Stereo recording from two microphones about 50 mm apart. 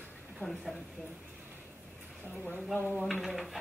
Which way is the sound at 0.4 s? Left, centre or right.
Centre.